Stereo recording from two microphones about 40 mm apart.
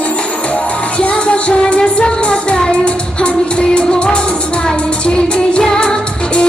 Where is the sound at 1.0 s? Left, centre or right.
Left.